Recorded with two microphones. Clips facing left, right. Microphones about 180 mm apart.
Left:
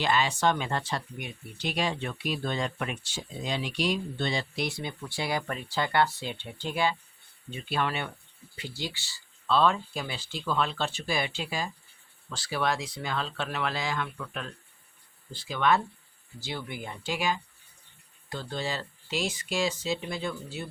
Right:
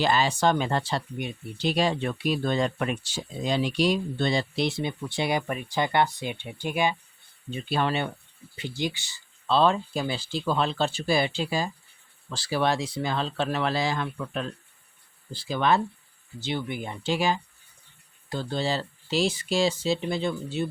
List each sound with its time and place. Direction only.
0.0 s speech: 35° right (ahead or behind); by 6.9 s 15° right (ahead or behind)
7.7 s speech: 30° right (ahead or behind)
8.5 s speech: 20° right (ahead or behind)
9.5 s speech: 30° right (ahead or behind)
16.4 s speech: 20° right (ahead or behind)